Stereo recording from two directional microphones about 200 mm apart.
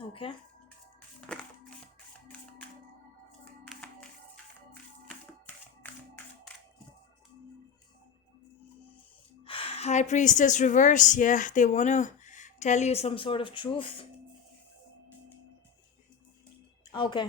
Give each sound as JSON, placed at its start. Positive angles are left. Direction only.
{"t": 0.1, "sound": "speech", "side_deg": 25}
{"t": 1.3, "sound": "a sound", "side_deg": 5}
{"t": 3.6, "sound": "clapping", "side_deg": 5}
{"t": 5.8, "sound": "music", "side_deg": 10}
{"t": 9.5, "sound": "a woman's voice", "side_deg": 30}
{"t": 16.9, "sound": "speech", "side_deg": 25}